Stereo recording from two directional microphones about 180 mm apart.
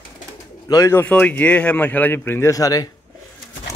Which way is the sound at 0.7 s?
15° left (ahead or behind).